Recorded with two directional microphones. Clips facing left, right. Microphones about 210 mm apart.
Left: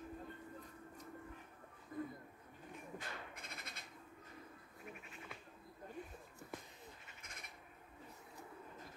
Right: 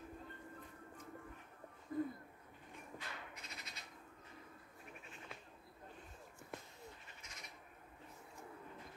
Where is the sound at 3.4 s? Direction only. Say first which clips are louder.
Left 1 dB; 55° left (ahead or behind).